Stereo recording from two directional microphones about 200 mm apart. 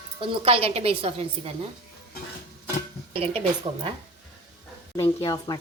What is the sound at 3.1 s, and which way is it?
Speech, 30° right (ahead or behind).